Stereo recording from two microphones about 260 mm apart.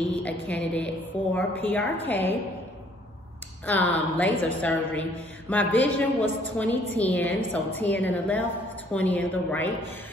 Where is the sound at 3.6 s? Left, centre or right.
Centre.